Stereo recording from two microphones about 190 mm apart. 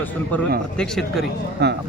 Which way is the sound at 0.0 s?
10° left (ahead or behind).